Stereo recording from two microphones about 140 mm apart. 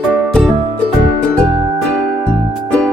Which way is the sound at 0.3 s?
5° left (ahead or behind).